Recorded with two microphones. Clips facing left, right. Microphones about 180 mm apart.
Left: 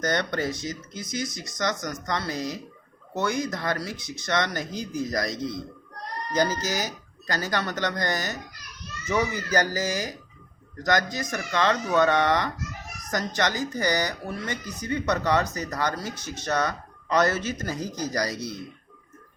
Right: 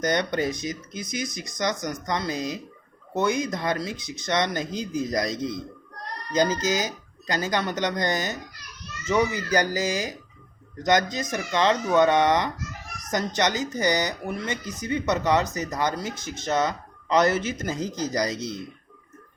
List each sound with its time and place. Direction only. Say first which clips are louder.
0.0 s speech: right 2 dB; 15° right (ahead or behind)
17.7 s speech: right 2 dB; 15° left (ahead or behind)
18.1 s speech: right 2 dB; 20° right (ahead or behind)